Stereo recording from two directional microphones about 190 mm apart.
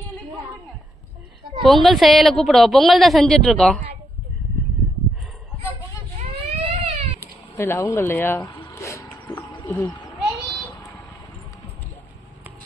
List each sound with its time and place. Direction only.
1.6 s a woman's voice: centre (ahead or behind)
6.7 s baby cry: 30° right (ahead or behind)
7.2 s speech: 15° left (ahead or behind)
8.6 s a sound: 15° left (ahead or behind)
9.7 s speech: 10° left (ahead or behind)
10.7 s vehicle: 10° left (ahead or behind)